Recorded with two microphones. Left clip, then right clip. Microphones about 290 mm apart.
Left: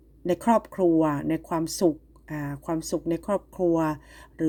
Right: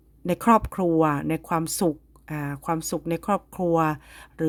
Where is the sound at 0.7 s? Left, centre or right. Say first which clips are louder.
Even; right.